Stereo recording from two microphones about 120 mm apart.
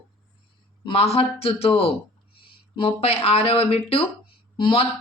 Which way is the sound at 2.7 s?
55° left (ahead or behind).